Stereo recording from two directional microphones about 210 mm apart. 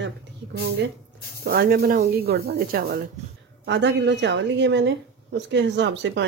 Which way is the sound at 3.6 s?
55° right (ahead or behind).